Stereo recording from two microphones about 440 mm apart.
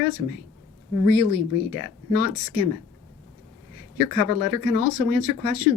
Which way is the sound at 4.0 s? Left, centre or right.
Left.